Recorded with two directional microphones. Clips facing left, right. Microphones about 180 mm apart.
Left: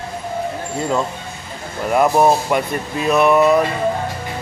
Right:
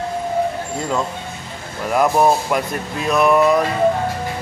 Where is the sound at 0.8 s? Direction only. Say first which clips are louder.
Left 4 dB; 5° left (ahead or behind).